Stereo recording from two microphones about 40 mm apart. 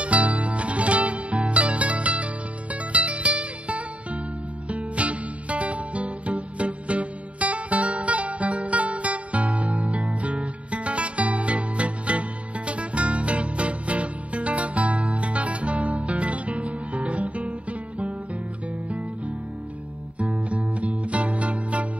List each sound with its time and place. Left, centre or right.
0.0 s music: right